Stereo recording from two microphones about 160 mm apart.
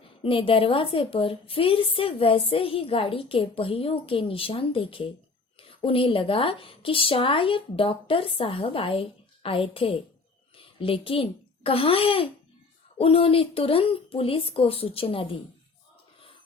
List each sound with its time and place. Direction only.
0.2 s a woman's voice: 35° left (ahead or behind)